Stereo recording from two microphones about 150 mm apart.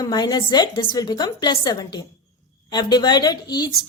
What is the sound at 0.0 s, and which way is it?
A woman's voice, 25° left (ahead or behind).